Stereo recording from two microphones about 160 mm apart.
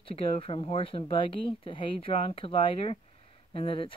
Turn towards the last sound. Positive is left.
turn(degrees=35)  # may be behind; listen again after turning